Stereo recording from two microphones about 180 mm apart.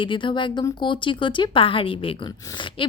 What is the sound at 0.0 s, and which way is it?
A woman's voice, 25° left (ahead or behind).